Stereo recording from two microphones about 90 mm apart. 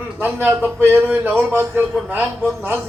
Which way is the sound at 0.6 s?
25° right (ahead or behind).